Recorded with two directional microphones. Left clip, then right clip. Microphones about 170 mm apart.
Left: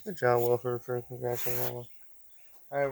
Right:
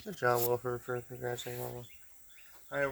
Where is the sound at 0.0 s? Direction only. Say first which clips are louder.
Left 4 dB; 25° left (ahead or behind).